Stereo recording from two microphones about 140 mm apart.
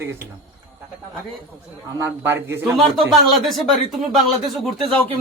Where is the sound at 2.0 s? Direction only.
20° right (ahead or behind).